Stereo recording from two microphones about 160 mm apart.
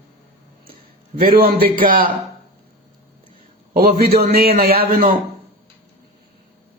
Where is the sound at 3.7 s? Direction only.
70° right (ahead or behind).